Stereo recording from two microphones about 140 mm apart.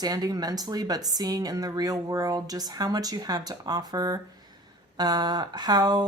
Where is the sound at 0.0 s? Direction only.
25° right (ahead or behind).